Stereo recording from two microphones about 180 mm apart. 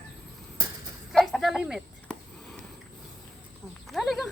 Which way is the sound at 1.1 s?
Centre (ahead or behind).